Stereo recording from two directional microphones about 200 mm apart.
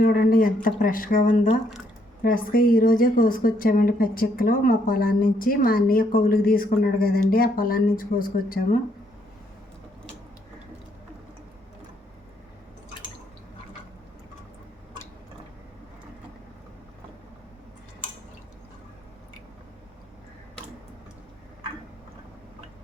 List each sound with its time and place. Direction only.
0.0 s speech: 45° left (ahead or behind)